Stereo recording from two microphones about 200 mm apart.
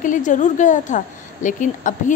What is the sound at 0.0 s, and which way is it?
Speech, 40° left (ahead or behind).